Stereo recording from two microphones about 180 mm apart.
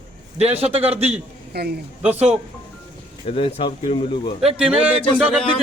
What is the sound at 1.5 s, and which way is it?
Speech, 60° right (ahead or behind).